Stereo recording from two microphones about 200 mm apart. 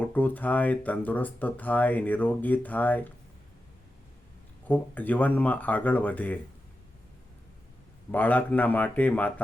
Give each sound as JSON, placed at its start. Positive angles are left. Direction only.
{"t": 0.0, "sound": "speech", "side_deg": 10}
{"t": 4.7, "sound": "speech", "side_deg": 10}
{"t": 8.1, "sound": "speech", "side_deg": 10}